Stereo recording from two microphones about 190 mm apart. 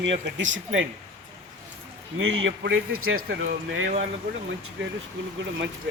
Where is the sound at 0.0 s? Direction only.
75° right (ahead or behind).